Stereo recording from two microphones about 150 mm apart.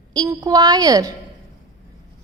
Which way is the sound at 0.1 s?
25° right (ahead or behind).